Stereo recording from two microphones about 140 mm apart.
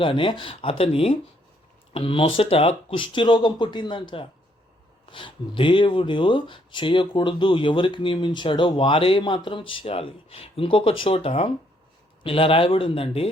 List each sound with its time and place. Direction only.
0.0 s speech: 40° left (ahead or behind)